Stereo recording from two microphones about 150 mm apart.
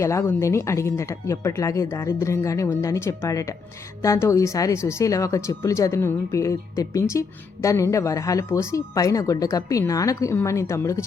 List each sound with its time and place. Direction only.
0.0 s speech: 20° left (ahead or behind)